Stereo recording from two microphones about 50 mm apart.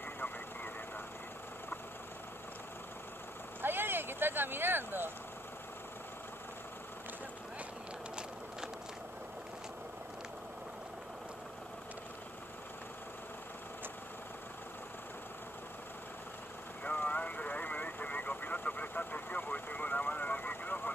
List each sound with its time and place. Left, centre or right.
3.6 s vehicle: right
16.9 s vehicle: left